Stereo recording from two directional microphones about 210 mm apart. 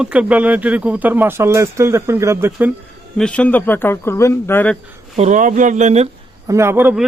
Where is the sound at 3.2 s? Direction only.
5° left (ahead or behind).